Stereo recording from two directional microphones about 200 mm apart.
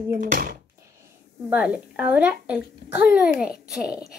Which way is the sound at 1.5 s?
5° right (ahead or behind).